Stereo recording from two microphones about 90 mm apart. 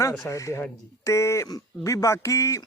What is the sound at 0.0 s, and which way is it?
A man's voice, 35° left (ahead or behind).